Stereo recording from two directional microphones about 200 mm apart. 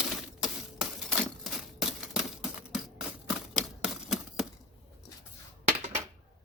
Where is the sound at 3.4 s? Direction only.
5° right (ahead or behind).